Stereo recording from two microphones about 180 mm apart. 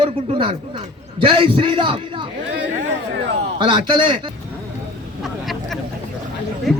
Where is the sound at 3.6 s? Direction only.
25° right (ahead or behind).